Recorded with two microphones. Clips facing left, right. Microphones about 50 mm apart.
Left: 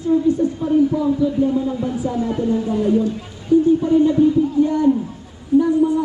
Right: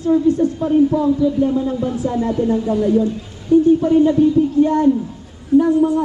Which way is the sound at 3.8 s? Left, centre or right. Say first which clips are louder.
Right 1 dB; right.